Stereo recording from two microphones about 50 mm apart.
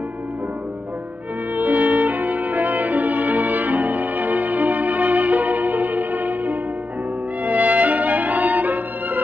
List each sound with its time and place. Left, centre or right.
1.5 s music: right